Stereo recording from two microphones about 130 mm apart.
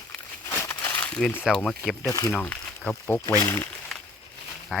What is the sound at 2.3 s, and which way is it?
Speech, 15° left (ahead or behind).